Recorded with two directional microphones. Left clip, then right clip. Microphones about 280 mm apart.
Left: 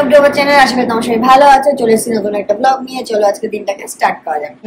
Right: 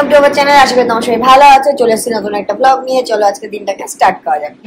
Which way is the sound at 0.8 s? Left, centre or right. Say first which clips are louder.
Right 2 dB; centre.